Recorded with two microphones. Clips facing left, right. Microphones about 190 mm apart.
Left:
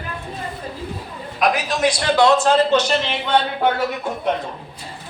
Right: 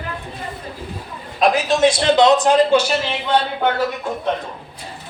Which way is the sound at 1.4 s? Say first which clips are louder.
Right 4 dB; 25° right (ahead or behind).